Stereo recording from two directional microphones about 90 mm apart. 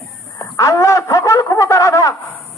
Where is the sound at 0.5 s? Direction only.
35° left (ahead or behind).